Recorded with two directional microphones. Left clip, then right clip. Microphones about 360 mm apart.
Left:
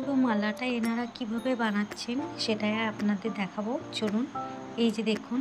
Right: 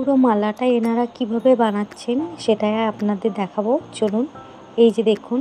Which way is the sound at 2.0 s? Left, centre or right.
Centre.